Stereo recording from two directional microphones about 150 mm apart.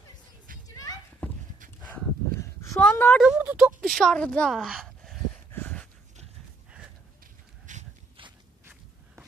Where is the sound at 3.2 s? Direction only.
10° right (ahead or behind).